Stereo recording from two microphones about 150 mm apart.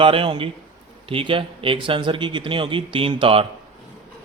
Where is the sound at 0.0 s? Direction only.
35° right (ahead or behind).